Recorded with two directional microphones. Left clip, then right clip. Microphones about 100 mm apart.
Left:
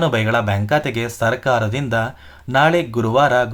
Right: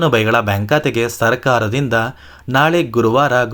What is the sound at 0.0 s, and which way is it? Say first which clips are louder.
Speech: right 4 dB; 30° right (ahead or behind).